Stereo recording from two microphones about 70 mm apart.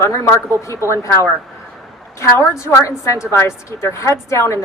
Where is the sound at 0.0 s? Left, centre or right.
Left.